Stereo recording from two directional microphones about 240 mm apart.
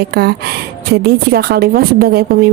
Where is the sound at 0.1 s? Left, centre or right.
Right.